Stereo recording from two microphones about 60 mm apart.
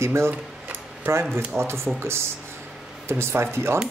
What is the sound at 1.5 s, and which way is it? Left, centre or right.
Speech, right.